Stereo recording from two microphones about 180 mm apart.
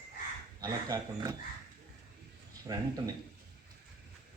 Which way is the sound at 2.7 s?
25° right (ahead or behind).